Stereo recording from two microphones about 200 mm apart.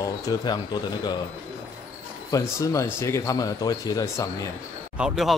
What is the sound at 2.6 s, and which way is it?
A man's voice, 15° left (ahead or behind).